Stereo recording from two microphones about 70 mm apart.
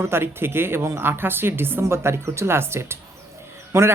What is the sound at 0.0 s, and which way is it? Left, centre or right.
Speech, right.